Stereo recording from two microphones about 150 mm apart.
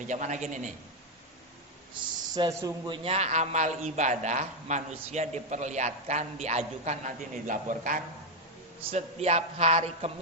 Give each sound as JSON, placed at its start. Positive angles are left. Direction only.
{"t": 0.1, "sound": "a man's voice", "side_deg": -55}
{"t": 2.3, "sound": "a man's voice", "side_deg": -25}
{"t": 8.8, "sound": "a man's voice", "side_deg": -45}